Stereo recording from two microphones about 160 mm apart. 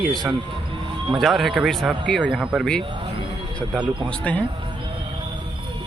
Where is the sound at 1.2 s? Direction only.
Centre (ahead or behind).